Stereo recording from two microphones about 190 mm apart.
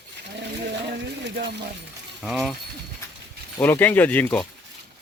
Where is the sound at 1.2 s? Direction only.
65° right (ahead or behind).